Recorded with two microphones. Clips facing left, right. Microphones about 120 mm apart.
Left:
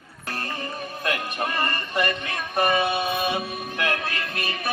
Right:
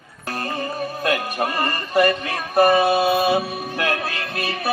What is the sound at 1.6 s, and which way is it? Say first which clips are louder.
Music: right 9 dB; 35° right (ahead or behind).